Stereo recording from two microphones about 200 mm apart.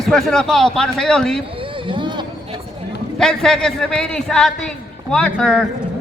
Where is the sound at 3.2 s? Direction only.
Centre (ahead or behind).